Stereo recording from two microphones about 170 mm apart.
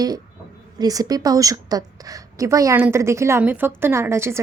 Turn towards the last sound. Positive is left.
turn(degrees=-15)  # may be behind; listen again after turning